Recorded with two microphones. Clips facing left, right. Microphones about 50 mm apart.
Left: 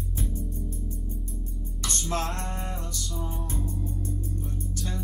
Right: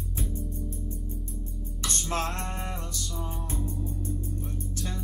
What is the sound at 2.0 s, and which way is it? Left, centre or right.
Music, right.